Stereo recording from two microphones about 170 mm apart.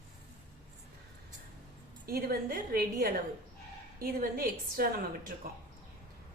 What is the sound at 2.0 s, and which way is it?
A woman's voice, 60° right (ahead or behind).